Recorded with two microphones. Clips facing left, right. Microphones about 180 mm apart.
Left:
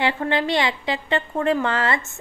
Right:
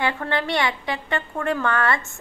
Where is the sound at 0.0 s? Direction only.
20° left (ahead or behind).